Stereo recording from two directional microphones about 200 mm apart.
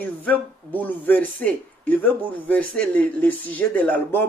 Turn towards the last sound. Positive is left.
turn(degrees=10)  # may be behind; listen again after turning